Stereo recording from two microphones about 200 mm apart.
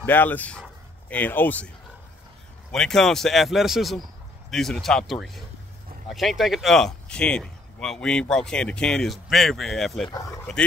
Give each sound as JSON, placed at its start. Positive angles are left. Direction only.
{"t": 0.0, "sound": "speech", "side_deg": 10}
{"t": 2.7, "sound": "speech", "side_deg": 0}
{"t": 10.0, "sound": "speech", "side_deg": 15}